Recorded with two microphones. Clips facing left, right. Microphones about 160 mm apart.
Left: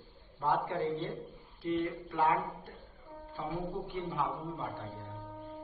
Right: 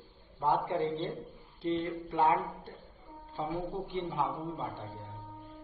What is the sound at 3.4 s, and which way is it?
A man's voice, 30° right (ahead or behind).